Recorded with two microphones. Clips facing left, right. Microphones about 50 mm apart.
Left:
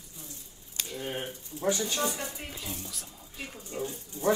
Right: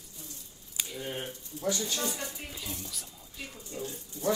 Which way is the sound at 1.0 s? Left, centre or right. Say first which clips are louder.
Left 4 dB; left.